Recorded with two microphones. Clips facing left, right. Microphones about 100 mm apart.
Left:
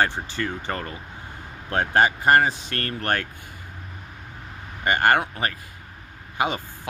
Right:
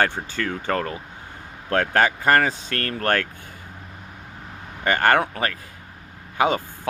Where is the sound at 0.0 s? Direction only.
55° right (ahead or behind).